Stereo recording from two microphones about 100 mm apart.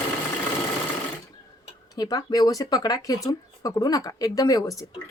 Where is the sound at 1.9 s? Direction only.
40° left (ahead or behind).